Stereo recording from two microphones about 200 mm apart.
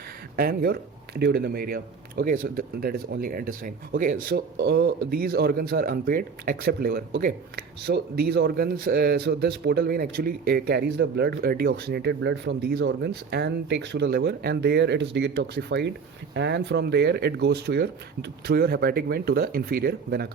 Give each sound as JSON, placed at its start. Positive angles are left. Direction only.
{"t": 0.3, "sound": "speech", "side_deg": -50}